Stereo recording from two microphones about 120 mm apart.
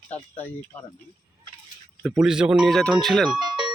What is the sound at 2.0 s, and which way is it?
Speech, centre (ahead or behind).